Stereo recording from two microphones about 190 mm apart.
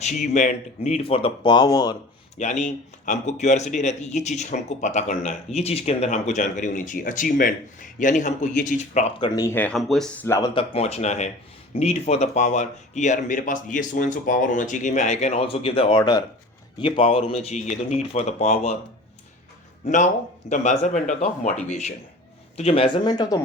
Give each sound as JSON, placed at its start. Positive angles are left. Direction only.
{"t": 0.0, "sound": "speech", "side_deg": 40}
{"t": 2.4, "sound": "speech", "side_deg": 40}
{"t": 9.3, "sound": "speech", "side_deg": 15}
{"t": 10.2, "sound": "speech", "side_deg": 15}
{"t": 10.5, "sound": "speech", "side_deg": 30}
{"t": 19.8, "sound": "speech", "side_deg": 40}